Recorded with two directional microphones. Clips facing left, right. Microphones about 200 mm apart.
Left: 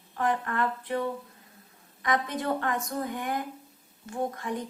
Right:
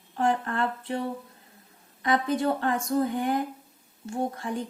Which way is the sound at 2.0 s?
30° right (ahead or behind).